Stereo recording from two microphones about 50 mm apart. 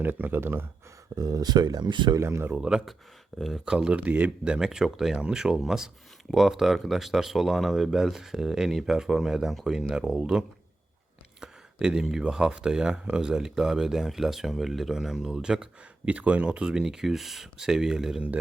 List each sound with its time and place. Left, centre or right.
0.0 s speech: right
2.1 s speech: right
2.6 s speech: centre
3.3 s speech: centre
3.7 s speech: centre
11.3 s a sound: centre
12.2 s speech: centre